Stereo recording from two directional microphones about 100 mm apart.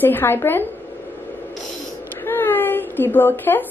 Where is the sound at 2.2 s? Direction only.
20° left (ahead or behind).